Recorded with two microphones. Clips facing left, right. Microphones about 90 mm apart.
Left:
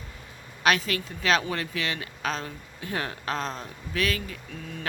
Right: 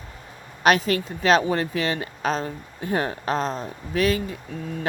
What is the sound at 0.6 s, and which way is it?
Speech, 40° right (ahead or behind).